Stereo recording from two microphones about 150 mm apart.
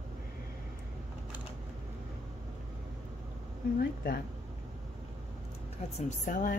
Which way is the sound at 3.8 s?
90° left.